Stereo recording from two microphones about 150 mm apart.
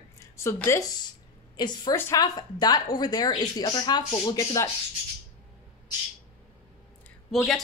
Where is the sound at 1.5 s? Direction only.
30° left (ahead or behind).